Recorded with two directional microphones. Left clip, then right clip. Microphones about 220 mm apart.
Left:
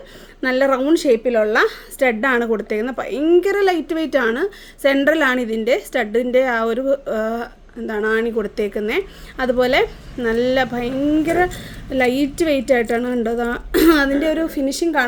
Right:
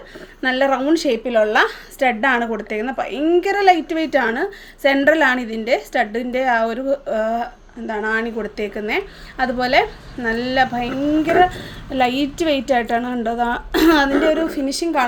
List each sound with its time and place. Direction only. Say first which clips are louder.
0.4 s a woman's voice: left 1 dB; 40° left (ahead or behind)
1.0 s a woman's voice: left 1 dB; 10° right (ahead or behind)
1.6 s a woman's voice: left 1 dB; 45° left (ahead or behind)